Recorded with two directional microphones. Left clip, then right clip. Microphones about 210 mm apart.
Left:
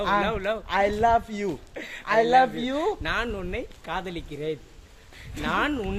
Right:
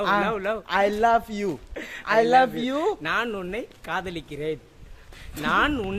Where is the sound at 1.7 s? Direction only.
30° right (ahead or behind).